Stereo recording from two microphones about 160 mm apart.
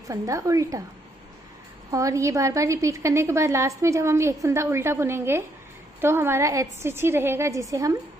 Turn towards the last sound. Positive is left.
turn(degrees=-20)  # may be behind; listen again after turning